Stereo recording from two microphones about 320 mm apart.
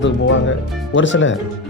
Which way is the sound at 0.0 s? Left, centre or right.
Left.